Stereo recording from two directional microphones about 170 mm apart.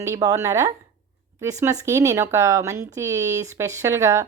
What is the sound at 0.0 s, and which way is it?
A woman's voice, 20° right (ahead or behind).